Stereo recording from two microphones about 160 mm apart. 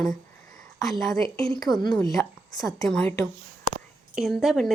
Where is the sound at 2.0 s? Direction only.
20° left (ahead or behind).